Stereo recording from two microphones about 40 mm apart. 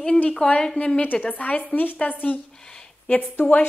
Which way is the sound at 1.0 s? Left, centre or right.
Left.